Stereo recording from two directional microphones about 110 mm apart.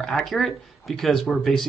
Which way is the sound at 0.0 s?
5° left (ahead or behind).